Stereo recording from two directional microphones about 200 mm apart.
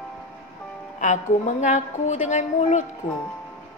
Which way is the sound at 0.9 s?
35° left (ahead or behind).